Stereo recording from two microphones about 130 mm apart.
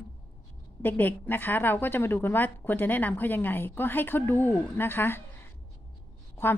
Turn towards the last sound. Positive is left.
turn(degrees=20)  # may be behind; listen again after turning